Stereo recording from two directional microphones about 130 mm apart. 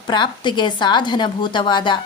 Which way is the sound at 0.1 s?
35° left (ahead or behind).